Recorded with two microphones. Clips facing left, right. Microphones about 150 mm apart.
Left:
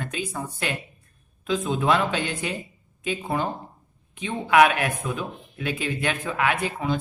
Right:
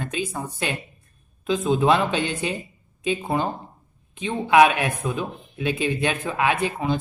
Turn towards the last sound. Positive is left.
turn(degrees=-25)  # may be behind; listen again after turning